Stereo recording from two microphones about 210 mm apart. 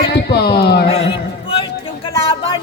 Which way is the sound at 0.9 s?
25° left (ahead or behind).